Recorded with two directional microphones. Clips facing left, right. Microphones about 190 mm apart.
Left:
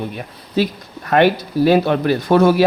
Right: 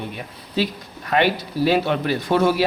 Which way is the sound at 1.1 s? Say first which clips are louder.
Left 6 dB; 50° left (ahead or behind).